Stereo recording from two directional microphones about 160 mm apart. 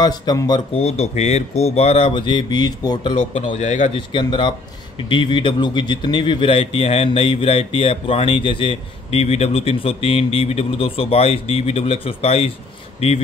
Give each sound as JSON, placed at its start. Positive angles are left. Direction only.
{"t": 0.0, "sound": "speech", "side_deg": 25}
{"t": 0.7, "sound": "speech", "side_deg": 40}
{"t": 3.3, "sound": "a man's voice", "side_deg": 40}
{"t": 3.9, "sound": "speech", "side_deg": 30}